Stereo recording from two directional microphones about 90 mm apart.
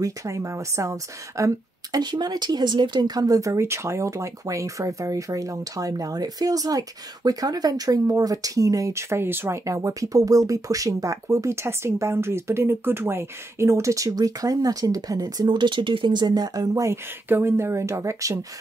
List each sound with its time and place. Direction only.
0.0 s a woman's voice: 35° right (ahead or behind)